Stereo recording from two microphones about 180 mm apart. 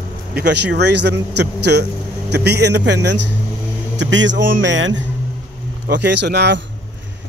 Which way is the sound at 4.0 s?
85° right.